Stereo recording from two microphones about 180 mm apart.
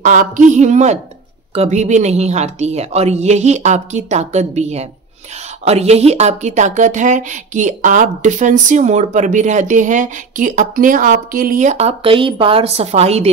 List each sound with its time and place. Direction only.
0.0 s a woman's voice: 45° right (ahead or behind)